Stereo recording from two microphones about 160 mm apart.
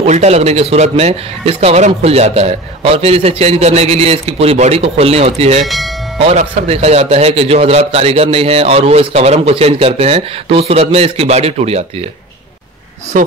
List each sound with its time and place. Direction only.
0.0 s a man's voice: 45° right (ahead or behind)
5.6 s speech: centre (ahead or behind)
6.1 s a man's voice: 40° right (ahead or behind)